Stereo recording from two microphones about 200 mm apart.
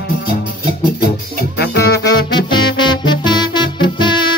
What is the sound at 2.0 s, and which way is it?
Music, 20° left (ahead or behind).